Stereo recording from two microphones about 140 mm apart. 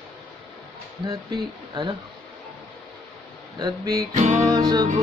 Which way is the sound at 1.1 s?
30° right (ahead or behind).